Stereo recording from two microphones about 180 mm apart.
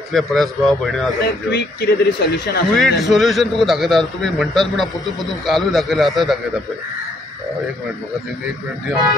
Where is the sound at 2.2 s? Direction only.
60° left (ahead or behind).